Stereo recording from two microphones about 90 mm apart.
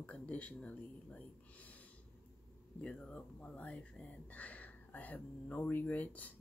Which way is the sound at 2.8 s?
10° left (ahead or behind).